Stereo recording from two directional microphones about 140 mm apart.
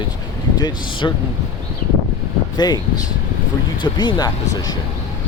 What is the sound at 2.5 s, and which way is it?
Speech, 30° left (ahead or behind).